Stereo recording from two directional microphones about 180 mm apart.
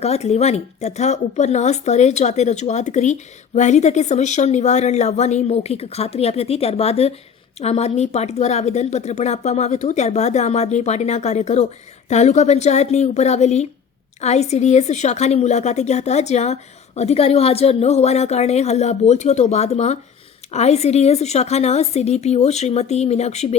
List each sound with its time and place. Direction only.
0.0 s speech: 35° left (ahead or behind)